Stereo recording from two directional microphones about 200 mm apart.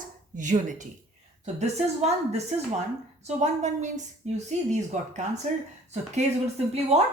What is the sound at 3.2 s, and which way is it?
A woman's voice, 35° right (ahead or behind).